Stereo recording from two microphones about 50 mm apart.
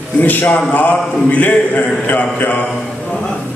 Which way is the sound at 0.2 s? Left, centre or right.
Left.